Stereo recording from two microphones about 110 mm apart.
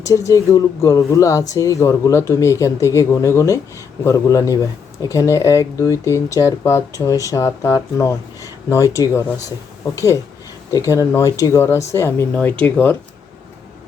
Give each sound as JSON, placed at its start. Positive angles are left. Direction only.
{"t": 0.0, "sound": "speech", "side_deg": 30}
{"t": 10.7, "sound": "speech", "side_deg": 30}